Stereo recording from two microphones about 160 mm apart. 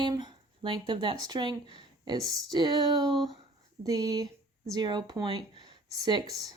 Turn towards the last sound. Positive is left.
turn(degrees=-25)  # may be behind; listen again after turning